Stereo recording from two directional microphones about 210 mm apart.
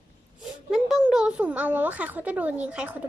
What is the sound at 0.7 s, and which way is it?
Speech, centre (ahead or behind).